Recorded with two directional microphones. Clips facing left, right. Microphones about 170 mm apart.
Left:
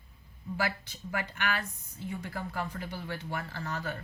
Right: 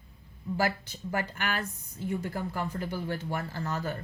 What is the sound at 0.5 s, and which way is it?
Speech, 40° right (ahead or behind).